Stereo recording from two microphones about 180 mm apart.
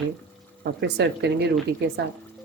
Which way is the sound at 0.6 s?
70° right (ahead or behind).